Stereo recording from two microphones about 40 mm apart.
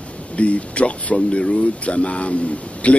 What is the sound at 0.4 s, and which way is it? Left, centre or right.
Speech, left.